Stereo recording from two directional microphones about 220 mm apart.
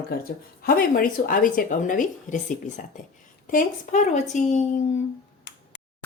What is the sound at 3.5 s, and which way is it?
Speech, 35° left (ahead or behind).